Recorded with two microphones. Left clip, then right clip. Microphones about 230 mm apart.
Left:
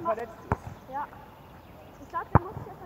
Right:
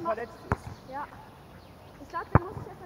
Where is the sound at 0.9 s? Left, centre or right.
Right.